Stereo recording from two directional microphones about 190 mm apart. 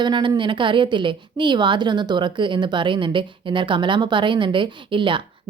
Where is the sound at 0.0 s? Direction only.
25° right (ahead or behind).